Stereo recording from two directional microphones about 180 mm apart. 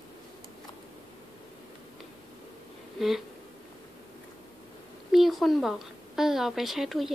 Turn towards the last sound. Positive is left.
turn(degrees=0)  # may be behind; listen again after turning